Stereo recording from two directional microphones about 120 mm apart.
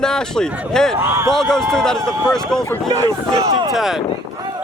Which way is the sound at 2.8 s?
30° right (ahead or behind).